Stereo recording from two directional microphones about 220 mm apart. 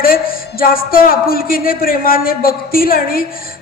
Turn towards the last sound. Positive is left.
turn(degrees=40)  # may be behind; listen again after turning